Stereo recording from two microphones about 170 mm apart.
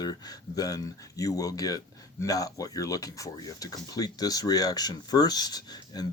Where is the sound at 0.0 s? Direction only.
25° left (ahead or behind).